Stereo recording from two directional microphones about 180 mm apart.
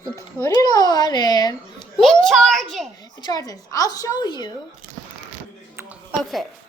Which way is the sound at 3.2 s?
20° left (ahead or behind).